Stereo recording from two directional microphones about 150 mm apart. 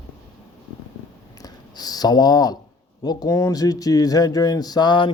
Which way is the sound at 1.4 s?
25° left (ahead or behind).